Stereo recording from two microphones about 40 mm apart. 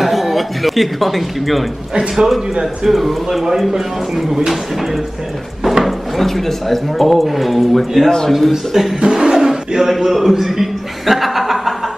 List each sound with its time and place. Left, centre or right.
0.0 s a sound: centre
2.6 s a man's voice: centre
5.6 s speech: centre
9.0 s speech: centre